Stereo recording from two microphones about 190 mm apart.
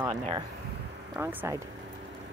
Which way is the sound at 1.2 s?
15° right (ahead or behind).